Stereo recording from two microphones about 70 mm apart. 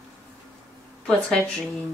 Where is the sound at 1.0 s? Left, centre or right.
Centre.